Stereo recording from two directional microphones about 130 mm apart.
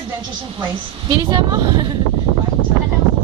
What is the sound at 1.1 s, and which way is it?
Speech, 35° right (ahead or behind).